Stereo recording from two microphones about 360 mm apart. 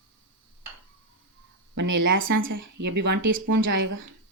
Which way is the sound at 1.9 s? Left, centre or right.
Right.